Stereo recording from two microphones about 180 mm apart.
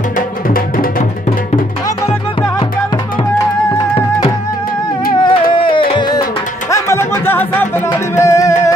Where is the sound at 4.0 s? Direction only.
30° left (ahead or behind).